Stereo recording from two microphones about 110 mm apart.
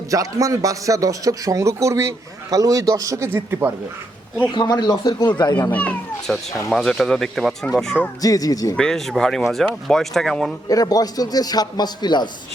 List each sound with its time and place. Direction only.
0.1 s a man's voice: 30° right (ahead or behind)
4.5 s a man's voice: 40° left (ahead or behind)
5.7 s speech: 15° left (ahead or behind)
6.3 s speech: centre (ahead or behind)
8.2 s a man's voice: 35° left (ahead or behind)
8.7 s speech: 5° left (ahead or behind)
10.7 s a man's voice: 35° left (ahead or behind)